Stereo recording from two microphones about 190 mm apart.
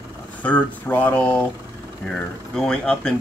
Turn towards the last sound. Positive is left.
turn(degrees=5)  # may be behind; listen again after turning